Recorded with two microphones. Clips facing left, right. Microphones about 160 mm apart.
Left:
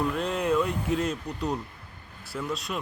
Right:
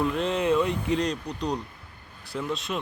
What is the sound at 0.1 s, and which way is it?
Speech, centre (ahead or behind).